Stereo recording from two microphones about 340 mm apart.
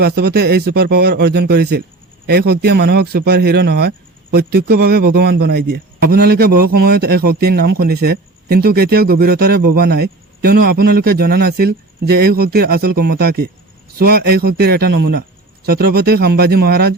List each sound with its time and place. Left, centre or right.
0.0 s speech: right